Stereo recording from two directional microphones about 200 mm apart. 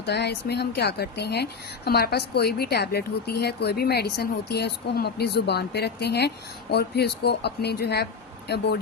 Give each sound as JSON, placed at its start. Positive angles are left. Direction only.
{"t": 0.0, "sound": "a woman's voice", "side_deg": 55}